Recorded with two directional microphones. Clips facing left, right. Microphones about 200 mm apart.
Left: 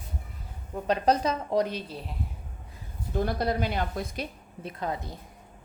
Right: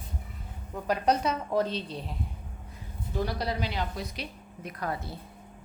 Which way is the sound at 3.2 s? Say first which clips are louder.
Left 4 dB; 50° left (ahead or behind).